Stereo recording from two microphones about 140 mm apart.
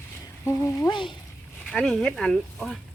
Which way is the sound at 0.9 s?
35° left (ahead or behind).